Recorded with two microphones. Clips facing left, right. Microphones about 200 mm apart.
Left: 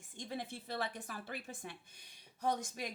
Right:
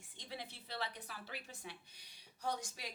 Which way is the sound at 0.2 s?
50° left (ahead or behind).